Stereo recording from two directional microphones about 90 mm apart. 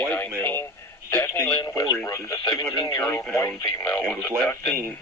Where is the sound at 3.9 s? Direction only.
25° left (ahead or behind).